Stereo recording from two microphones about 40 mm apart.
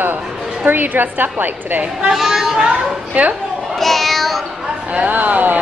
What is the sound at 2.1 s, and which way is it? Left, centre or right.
Speech, centre.